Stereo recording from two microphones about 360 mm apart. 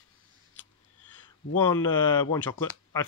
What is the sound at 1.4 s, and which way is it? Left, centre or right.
Speech, left.